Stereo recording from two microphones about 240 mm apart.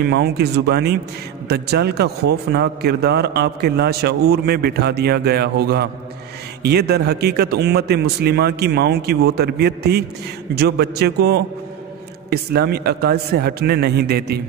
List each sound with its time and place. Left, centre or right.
0.0 s a man's voice: right